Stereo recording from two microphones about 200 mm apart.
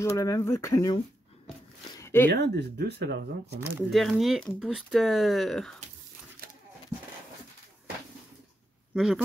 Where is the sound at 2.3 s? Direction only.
55° right (ahead or behind).